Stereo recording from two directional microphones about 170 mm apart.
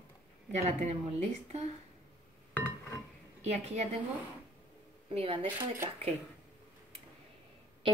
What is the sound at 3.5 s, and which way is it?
Speech, 40° right (ahead or behind).